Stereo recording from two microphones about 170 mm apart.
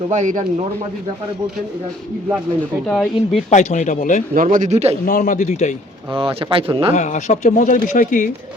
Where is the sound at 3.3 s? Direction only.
45° left (ahead or behind).